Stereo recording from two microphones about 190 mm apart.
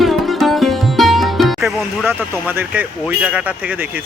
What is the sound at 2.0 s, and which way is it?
Speech, 10° right (ahead or behind).